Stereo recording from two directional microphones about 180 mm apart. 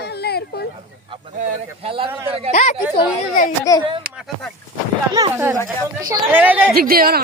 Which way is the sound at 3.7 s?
20° left (ahead or behind).